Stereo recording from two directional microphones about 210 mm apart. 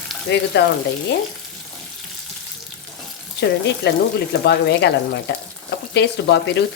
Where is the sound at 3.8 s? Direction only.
50° left (ahead or behind).